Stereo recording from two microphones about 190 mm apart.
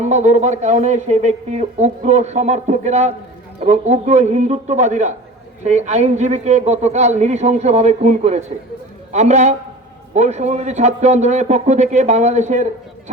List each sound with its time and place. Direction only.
0.0 s speech: 35° right (ahead or behind)